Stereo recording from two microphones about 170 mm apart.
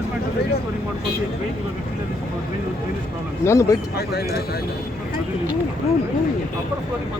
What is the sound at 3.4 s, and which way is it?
Speech, 15° left (ahead or behind).